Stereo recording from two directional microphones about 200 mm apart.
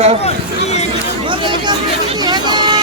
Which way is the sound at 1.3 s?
25° right (ahead or behind).